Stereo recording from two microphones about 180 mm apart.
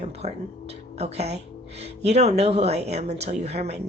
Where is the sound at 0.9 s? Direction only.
35° right (ahead or behind).